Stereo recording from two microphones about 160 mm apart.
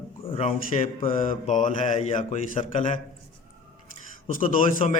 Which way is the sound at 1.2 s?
55° left (ahead or behind).